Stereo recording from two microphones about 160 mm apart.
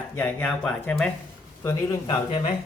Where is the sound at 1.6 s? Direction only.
20° left (ahead or behind).